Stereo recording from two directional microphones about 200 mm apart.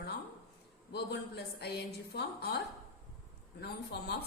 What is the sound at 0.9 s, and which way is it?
A woman's voice, 55° left (ahead or behind).